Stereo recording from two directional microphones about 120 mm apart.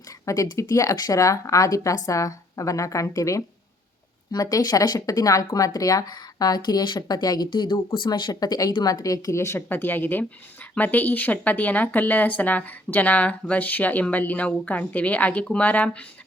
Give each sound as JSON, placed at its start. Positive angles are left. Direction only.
{"t": 0.5, "sound": "a woman's voice", "side_deg": 30}